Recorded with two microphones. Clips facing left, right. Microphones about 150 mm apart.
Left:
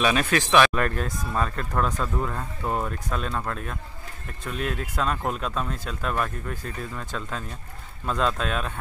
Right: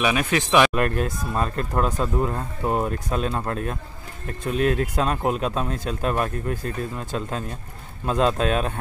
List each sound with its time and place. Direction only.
0.0 s speech: 15° right (ahead or behind)
3.4 s a man's voice: 35° right (ahead or behind)
5.0 s speech: 20° right (ahead or behind)
8.0 s speech: 20° right (ahead or behind)